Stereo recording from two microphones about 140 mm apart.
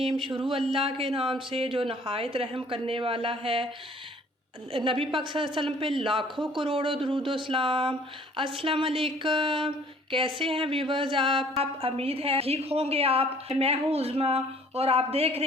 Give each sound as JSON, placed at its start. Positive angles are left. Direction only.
{"t": 0.0, "sound": "a woman's voice", "side_deg": -40}
{"t": 4.7, "sound": "a woman's voice", "side_deg": -40}